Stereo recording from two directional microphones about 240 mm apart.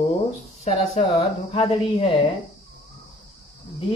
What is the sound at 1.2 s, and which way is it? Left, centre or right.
Speech, left.